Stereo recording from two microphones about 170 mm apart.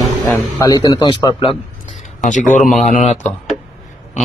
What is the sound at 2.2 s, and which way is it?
Speech, 50° left (ahead or behind).